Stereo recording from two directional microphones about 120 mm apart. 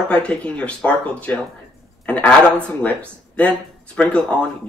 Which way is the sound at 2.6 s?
10° left (ahead or behind).